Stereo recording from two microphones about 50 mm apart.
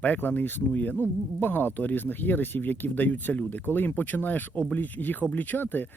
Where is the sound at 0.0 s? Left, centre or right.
Left.